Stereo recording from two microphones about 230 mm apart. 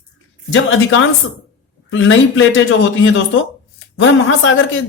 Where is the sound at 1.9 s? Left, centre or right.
Left.